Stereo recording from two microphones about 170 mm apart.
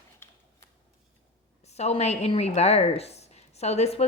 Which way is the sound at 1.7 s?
40° left (ahead or behind).